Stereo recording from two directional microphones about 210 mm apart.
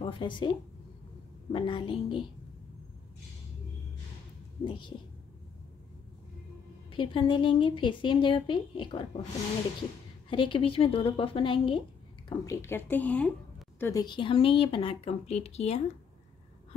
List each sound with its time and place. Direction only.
0.0 s speech: 25° left (ahead or behind)
1.5 s a woman's voice: 25° left (ahead or behind)
4.6 s a woman's voice: 20° left (ahead or behind)
6.9 s a woman's voice: 25° left (ahead or behind)
10.3 s a woman's voice: 25° left (ahead or behind)
12.3 s a woman's voice: 15° left (ahead or behind); by 15.8 s 30° left (ahead or behind)